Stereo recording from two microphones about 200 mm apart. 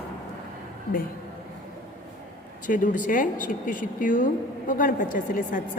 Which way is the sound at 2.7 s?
40° left (ahead or behind).